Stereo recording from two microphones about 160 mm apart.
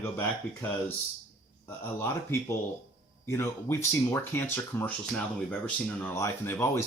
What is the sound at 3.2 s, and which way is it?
Speech, 15° left (ahead or behind).